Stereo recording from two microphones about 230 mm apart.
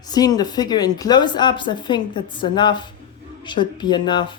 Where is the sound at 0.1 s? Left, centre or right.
Centre.